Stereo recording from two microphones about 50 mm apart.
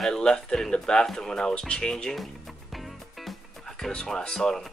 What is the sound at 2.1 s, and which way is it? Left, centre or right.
Music, centre.